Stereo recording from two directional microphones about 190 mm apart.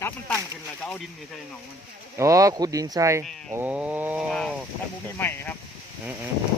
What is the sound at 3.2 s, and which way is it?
Speech, 5° left (ahead or behind).